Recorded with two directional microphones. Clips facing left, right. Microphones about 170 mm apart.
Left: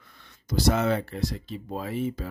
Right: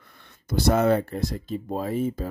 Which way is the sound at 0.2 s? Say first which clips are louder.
Right 1 dB; 55° right (ahead or behind).